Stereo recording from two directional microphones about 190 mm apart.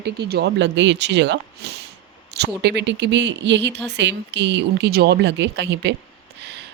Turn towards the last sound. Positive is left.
turn(degrees=-65)  # may be behind; listen again after turning